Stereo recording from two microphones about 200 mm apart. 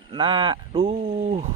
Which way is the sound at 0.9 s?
40° right (ahead or behind).